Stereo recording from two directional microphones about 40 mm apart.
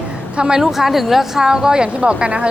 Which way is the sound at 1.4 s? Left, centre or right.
Centre.